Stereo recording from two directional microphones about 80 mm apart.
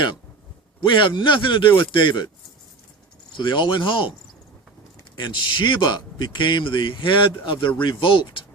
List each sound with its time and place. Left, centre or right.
0.8 s speech: left
3.3 s a man's voice: left
5.1 s a man's voice: left